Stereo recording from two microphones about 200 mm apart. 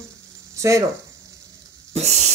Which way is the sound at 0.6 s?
15° right (ahead or behind).